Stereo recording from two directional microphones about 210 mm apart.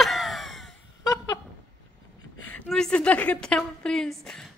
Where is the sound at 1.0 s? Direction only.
15° left (ahead or behind).